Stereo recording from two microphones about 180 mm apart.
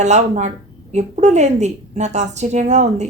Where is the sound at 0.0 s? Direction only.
40° right (ahead or behind).